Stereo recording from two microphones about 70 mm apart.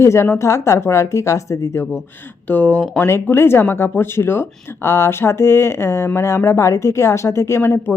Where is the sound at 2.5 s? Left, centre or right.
Left.